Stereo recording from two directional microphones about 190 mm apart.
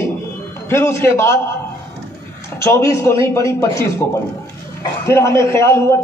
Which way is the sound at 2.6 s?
15° left (ahead or behind).